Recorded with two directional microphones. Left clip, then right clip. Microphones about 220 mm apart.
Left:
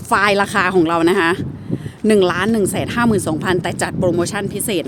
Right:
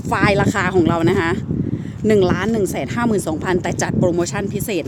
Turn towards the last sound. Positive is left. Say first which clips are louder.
# left 2 dB
turn(degrees=5)  # may be behind; listen again after turning